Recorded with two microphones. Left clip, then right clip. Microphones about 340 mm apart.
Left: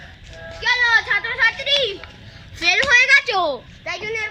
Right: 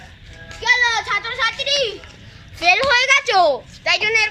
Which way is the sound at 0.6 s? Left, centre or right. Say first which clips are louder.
Even; centre.